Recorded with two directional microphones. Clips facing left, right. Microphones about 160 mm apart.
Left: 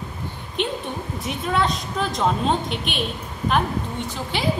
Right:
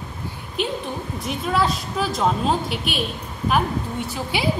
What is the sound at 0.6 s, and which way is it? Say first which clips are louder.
A woman's voice: even; 5° right (ahead or behind).